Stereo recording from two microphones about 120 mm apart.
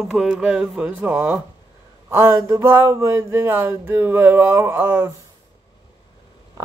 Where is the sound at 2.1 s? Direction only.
20° right (ahead or behind).